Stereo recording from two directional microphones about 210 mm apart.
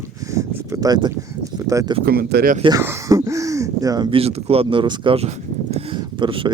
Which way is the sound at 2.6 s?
20° right (ahead or behind).